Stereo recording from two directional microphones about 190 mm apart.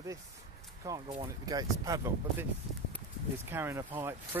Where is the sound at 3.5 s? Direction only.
10° right (ahead or behind).